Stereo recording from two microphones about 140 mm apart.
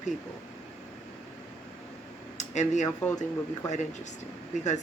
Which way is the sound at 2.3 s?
60° left (ahead or behind).